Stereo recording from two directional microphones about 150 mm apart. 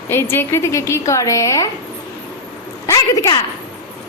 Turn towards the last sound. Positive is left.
turn(degrees=20)  # may be behind; listen again after turning